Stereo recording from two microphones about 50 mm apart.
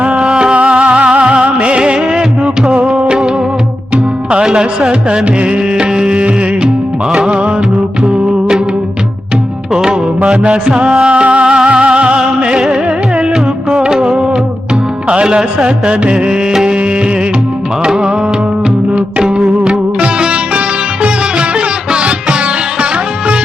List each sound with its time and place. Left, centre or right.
0.0 s music: right
10.2 s music: right
17.8 s music: centre
19.2 s music: centre
21.9 s music: centre